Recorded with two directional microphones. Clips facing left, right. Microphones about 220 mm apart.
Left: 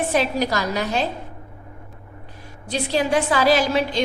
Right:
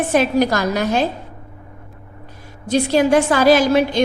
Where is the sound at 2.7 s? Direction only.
45° right (ahead or behind).